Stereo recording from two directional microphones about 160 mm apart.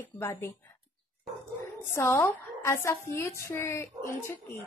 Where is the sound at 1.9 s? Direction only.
15° left (ahead or behind).